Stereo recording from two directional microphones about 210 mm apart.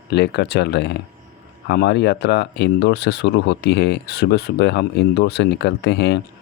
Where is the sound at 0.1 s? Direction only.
55° left (ahead or behind).